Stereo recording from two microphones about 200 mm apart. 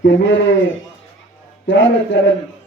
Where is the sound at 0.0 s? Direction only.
65° left (ahead or behind).